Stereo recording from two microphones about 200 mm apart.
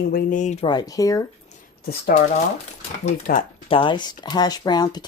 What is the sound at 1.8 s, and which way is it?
Speech, 50° left (ahead or behind).